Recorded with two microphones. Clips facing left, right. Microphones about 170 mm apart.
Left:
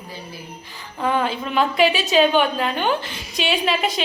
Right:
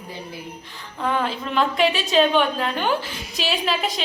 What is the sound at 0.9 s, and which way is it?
A woman's voice, centre (ahead or behind).